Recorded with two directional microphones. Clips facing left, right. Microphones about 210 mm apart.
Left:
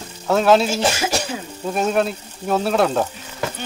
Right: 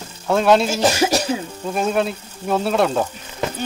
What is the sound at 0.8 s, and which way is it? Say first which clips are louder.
Speech: right 4 dB; 35° right (ahead or behind).